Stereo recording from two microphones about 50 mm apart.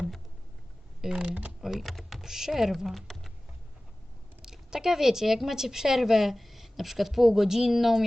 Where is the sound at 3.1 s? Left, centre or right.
Centre.